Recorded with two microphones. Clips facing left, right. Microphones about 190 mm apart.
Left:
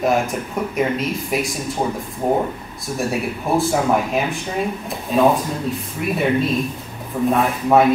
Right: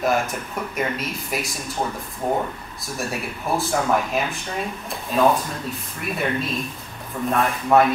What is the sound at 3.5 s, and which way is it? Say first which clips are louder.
Speech: left 4 dB; 5° left (ahead or behind).